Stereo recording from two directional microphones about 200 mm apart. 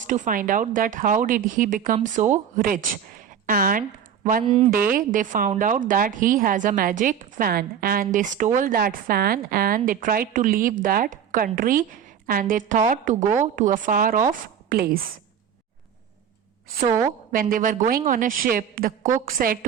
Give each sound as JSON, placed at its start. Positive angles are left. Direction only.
{"t": 0.1, "sound": "a woman's voice", "side_deg": -40}
{"t": 4.4, "sound": "speech", "side_deg": -30}
{"t": 4.9, "sound": "a woman's voice", "side_deg": -40}
{"t": 17.3, "sound": "a woman's voice", "side_deg": -45}